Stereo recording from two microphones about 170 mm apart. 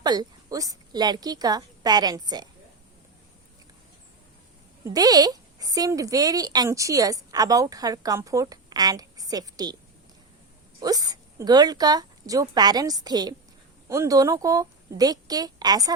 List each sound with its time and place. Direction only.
0.0 s a woman's voice: 25° right (ahead or behind)
4.9 s a woman's voice: 20° right (ahead or behind)
10.8 s a woman's voice: 20° right (ahead or behind)